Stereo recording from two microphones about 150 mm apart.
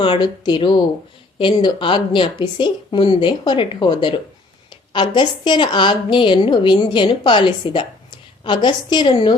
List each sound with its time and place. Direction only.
0.0 s a woman's voice: 30° left (ahead or behind)